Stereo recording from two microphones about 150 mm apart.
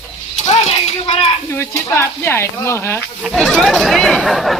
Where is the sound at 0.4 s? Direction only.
50° left (ahead or behind).